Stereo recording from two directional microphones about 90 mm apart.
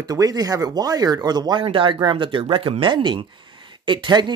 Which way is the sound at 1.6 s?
70° right (ahead or behind).